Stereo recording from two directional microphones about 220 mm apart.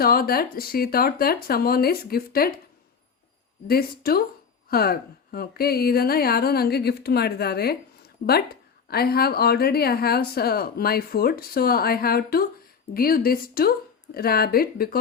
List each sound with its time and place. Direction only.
0.0 s a woman's voice: 45° left (ahead or behind)
3.7 s a woman's voice: 45° left (ahead or behind)